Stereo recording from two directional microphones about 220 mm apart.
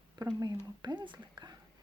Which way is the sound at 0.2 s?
20° right (ahead or behind).